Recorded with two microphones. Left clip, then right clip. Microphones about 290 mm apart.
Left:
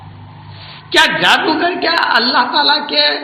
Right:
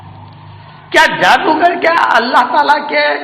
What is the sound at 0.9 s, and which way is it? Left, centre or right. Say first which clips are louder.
A man's voice: right 2 dB; centre.